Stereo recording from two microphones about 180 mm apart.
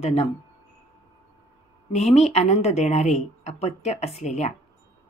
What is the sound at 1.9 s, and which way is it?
A woman's voice, 40° left (ahead or behind).